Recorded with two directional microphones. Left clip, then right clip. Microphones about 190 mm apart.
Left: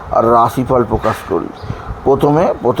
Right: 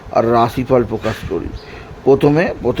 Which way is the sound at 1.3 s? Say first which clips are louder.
Left 3 dB; 15° right (ahead or behind).